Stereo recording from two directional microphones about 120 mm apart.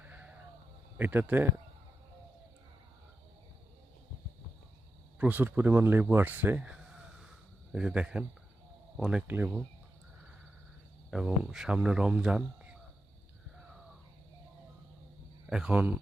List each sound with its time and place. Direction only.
0.0 s a sound: 15° right (ahead or behind)
0.9 s speech: 15° right (ahead or behind)
5.2 s speech: 15° right (ahead or behind)
9.2 s speech: 15° right (ahead or behind)
11.1 s speech: 5° right (ahead or behind)
15.4 s speech: 5° right (ahead or behind)